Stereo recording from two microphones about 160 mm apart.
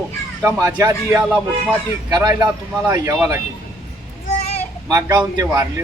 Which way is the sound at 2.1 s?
20° right (ahead or behind).